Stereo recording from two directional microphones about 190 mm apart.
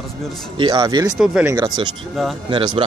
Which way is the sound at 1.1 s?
5° right (ahead or behind).